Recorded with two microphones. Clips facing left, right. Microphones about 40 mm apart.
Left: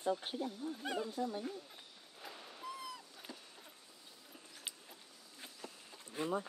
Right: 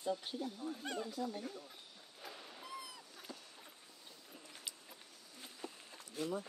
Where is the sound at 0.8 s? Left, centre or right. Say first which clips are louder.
Left 4 dB; centre.